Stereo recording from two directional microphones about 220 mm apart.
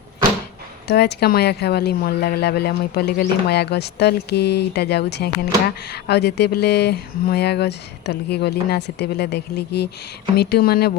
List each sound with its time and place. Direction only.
0.9 s speech: 50° left (ahead or behind)